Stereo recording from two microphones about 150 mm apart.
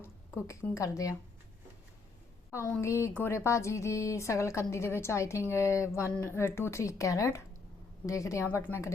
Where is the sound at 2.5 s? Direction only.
20° left (ahead or behind).